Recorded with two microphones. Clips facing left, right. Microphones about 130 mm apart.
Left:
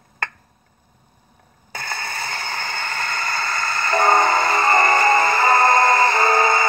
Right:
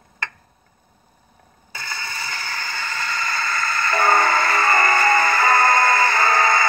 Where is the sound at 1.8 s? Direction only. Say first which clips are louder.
Left 3 dB; 55° left (ahead or behind).